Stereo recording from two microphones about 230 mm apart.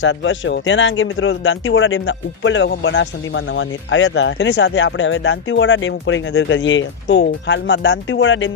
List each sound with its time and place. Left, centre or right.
0.0 s speech: left